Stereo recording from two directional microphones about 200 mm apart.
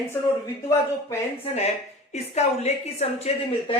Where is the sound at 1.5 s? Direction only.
35° left (ahead or behind).